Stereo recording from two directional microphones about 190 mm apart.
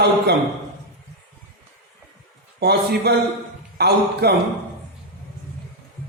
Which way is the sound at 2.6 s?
60° right (ahead or behind).